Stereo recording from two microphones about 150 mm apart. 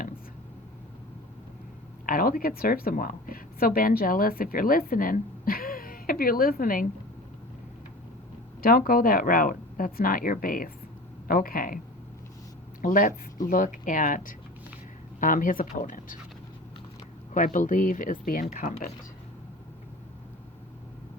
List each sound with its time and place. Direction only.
2.0 s a woman's voice: 70° left (ahead or behind)
8.6 s a woman's voice: 70° left (ahead or behind)
12.8 s a woman's voice: 65° left (ahead or behind)
17.3 s speech: 60° left (ahead or behind)